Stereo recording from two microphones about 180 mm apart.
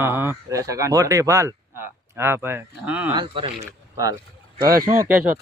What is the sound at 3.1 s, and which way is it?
Speech, 25° right (ahead or behind).